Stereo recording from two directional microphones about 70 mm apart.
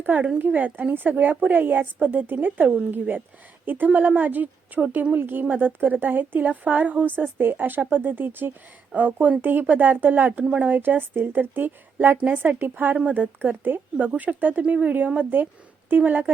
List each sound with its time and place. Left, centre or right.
0.0 s a woman's voice: right